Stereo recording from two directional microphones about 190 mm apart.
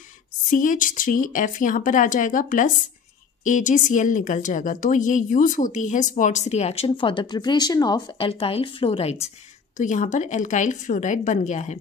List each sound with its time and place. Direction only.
0.5 s a woman's voice: 45° left (ahead or behind)